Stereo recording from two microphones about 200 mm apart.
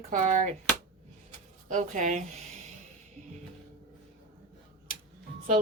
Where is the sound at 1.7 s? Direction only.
40° right (ahead or behind).